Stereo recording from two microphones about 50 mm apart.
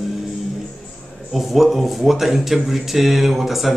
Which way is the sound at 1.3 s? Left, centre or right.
Centre.